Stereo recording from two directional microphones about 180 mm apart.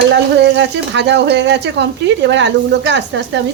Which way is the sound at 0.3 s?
80° right.